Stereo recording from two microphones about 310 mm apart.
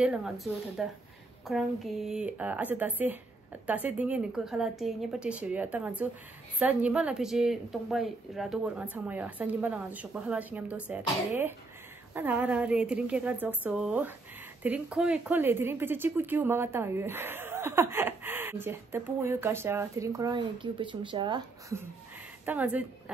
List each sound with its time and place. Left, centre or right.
0.0 s a woman's voice: centre